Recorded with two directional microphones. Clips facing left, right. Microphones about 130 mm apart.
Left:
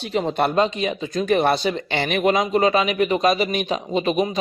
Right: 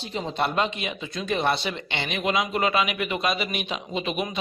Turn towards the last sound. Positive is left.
turn(degrees=35)  # may be behind; listen again after turning